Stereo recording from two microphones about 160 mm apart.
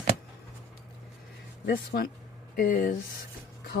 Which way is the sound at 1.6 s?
70° left (ahead or behind).